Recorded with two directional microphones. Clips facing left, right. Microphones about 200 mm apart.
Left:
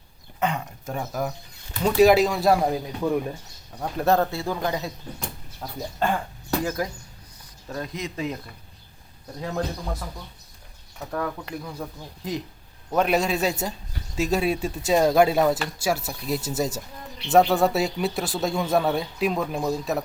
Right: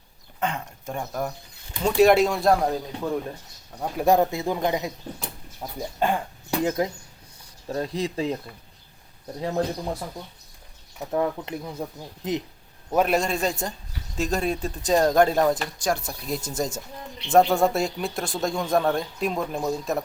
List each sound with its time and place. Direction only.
0.3 s speech: centre (ahead or behind)
3.8 s a man's voice: 10° right (ahead or behind)
7.7 s speech: 30° right (ahead or behind)
9.4 s speech: 30° right (ahead or behind)
11.1 s speech: 20° right (ahead or behind)
12.9 s speech: centre (ahead or behind)